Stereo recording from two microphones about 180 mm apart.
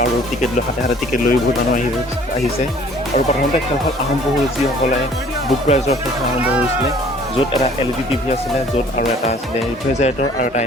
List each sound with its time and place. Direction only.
1.1 s speech: 50° left (ahead or behind)
5.6 s speech: 35° left (ahead or behind)
7.3 s speech: 35° left (ahead or behind)
10.0 s speech: 40° left (ahead or behind)